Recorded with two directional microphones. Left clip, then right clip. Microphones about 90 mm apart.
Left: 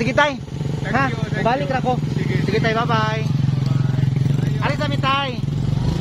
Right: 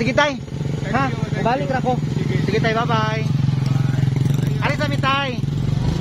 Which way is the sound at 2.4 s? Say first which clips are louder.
Even; centre (ahead or behind).